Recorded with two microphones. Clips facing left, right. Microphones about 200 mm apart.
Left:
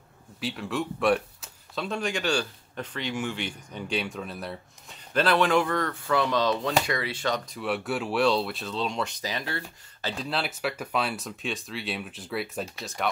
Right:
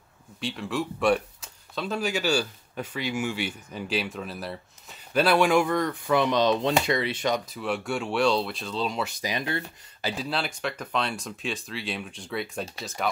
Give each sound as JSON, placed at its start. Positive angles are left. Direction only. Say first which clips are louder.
{"t": 0.4, "sound": "speech", "louder": "even", "side_deg": 0}
{"t": 7.4, "sound": "speech", "louder": "even", "side_deg": 0}
{"t": 10.1, "sound": "speech", "louder": "left 1 dB", "side_deg": 0}